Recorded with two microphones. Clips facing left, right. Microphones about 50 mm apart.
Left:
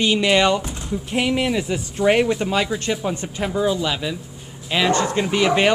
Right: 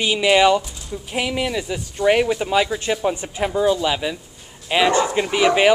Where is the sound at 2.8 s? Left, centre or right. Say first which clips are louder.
Right 2 dB; centre.